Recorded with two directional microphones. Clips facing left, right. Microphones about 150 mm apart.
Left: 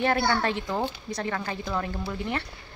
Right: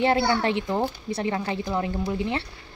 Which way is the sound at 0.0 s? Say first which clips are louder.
Right 3 dB; 20° right (ahead or behind).